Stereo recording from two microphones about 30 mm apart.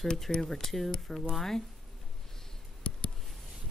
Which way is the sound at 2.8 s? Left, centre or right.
Left.